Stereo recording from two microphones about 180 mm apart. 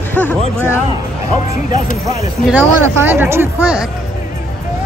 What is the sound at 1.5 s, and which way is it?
Speech, 45° left (ahead or behind).